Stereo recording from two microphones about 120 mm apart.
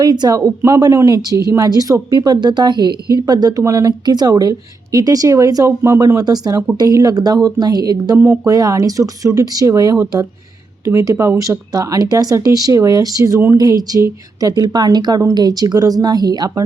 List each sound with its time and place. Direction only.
0.0 s speech: 35° right (ahead or behind)